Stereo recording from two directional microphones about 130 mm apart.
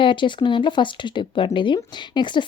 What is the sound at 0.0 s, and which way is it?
A woman's voice, 40° left (ahead or behind).